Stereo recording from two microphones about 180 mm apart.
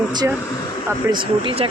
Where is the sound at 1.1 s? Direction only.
30° right (ahead or behind).